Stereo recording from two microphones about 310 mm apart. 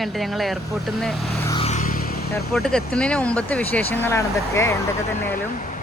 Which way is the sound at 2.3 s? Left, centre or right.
Centre.